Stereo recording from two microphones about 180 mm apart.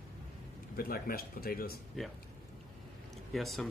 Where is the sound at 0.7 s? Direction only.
55° left (ahead or behind).